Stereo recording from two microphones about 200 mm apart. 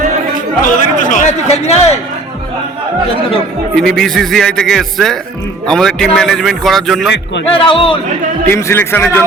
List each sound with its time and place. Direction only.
0.6 s speech: 40° left (ahead or behind)
3.8 s a man's voice: centre (ahead or behind)
7.5 s speech: 25° left (ahead or behind)
8.4 s a man's voice: 10° left (ahead or behind)